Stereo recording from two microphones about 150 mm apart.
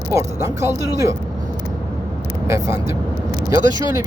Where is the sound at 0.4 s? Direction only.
20° right (ahead or behind).